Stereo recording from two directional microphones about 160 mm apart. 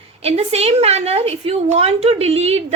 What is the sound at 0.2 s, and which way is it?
A woman's voice, 40° right (ahead or behind).